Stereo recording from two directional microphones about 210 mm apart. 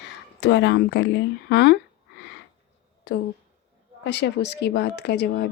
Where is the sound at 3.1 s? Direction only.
55° left (ahead or behind).